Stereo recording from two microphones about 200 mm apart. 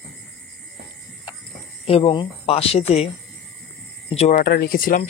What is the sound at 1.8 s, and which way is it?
Speech, 25° left (ahead or behind).